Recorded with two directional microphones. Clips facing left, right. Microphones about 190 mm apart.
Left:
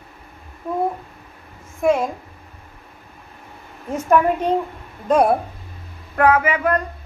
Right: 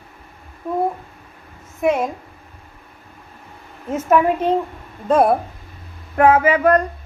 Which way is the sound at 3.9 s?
5° right (ahead or behind).